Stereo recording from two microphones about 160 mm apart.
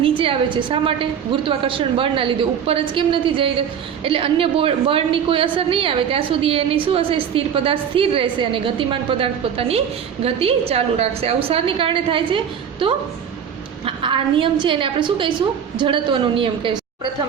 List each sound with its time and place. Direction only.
0.2 s a woman's voice: 35° right (ahead or behind)
13.8 s a woman's voice: 30° right (ahead or behind)